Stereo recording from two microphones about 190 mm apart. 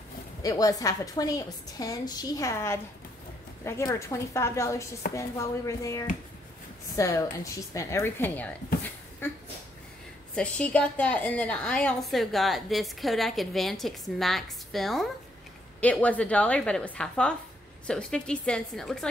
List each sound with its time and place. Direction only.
0.4 s a woman's voice: 20° left (ahead or behind); by 19.0 s centre (ahead or behind)